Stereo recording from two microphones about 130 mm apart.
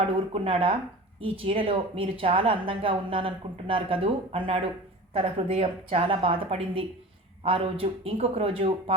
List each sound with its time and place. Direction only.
0.3 s speech: 45° right (ahead or behind)